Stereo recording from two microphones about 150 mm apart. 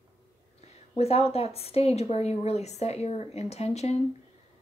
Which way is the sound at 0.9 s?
45° left (ahead or behind).